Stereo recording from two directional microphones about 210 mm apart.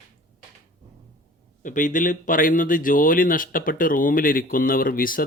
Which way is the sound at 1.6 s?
40° left (ahead or behind).